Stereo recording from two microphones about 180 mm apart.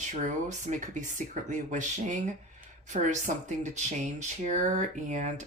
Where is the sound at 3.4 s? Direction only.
40° right (ahead or behind).